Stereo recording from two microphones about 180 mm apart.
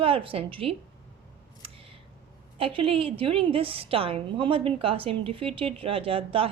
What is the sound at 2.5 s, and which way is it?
A woman's voice, 30° right (ahead or behind).